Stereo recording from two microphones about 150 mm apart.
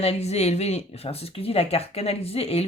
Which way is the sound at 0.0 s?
45° left (ahead or behind).